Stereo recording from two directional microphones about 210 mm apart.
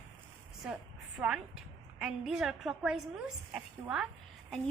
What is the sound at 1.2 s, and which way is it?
A woman's voice, 5° right (ahead or behind).